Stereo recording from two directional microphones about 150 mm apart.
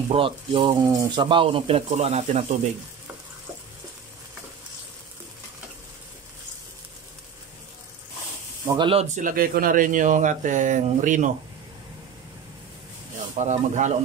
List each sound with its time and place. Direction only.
0.1 s speech: 35° right (ahead or behind)
8.6 s speech: 35° right (ahead or behind)
9.1 s speech: 70° right (ahead or behind)
13.4 s speech: 55° right (ahead or behind)